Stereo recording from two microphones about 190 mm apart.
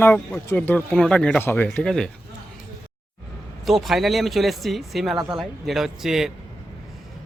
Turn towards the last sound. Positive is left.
turn(degrees=0)  # may be behind; listen again after turning